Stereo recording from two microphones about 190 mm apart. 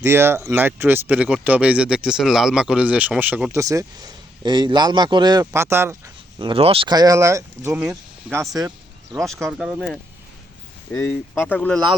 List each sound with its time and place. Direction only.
0.0 s speech: 15° right (ahead or behind)
6.4 s speech: 30° right (ahead or behind); by 8.7 s 15° right (ahead or behind)
9.1 s speech: centre (ahead or behind)
10.9 s speech: 15° left (ahead or behind)